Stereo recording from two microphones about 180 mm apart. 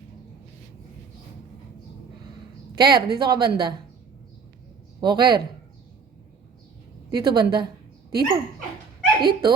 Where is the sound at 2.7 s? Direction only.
25° right (ahead or behind).